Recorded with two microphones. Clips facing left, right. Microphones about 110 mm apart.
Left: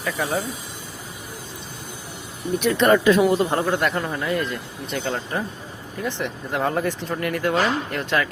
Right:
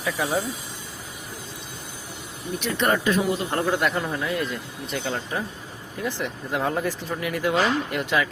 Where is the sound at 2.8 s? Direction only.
90° left.